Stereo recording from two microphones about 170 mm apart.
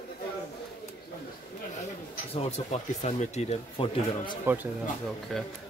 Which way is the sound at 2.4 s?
40° left (ahead or behind).